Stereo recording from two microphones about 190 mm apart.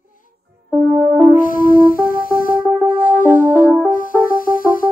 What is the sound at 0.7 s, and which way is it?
Music, 10° right (ahead or behind).